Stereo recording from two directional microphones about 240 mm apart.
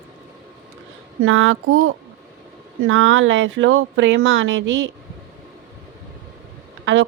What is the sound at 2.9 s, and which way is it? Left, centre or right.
Speech, right.